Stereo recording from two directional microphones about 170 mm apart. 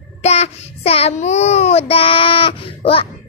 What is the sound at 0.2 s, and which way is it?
Child singing, 40° left (ahead or behind).